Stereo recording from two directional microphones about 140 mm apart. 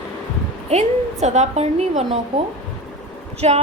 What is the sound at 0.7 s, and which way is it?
A woman's voice, 55° right (ahead or behind).